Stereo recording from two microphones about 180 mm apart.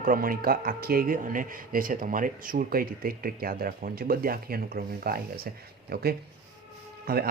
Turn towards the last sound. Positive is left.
turn(degrees=-55)  # may be behind; listen again after turning